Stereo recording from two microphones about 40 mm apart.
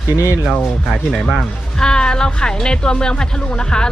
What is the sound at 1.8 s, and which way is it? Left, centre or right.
Speech, left.